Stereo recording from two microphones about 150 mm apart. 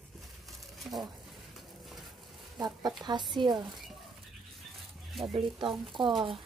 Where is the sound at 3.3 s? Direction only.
30° right (ahead or behind).